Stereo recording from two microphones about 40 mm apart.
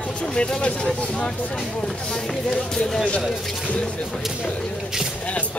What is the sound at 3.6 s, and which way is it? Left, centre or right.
Speech, left.